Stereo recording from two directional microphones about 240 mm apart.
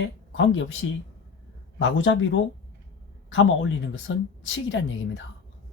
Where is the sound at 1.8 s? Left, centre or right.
Left.